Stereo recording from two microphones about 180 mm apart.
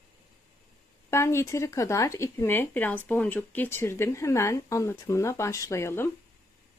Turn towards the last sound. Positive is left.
turn(degrees=15)  # may be behind; listen again after turning